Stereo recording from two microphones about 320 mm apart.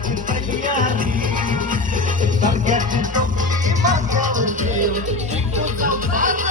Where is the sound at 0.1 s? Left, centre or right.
Right.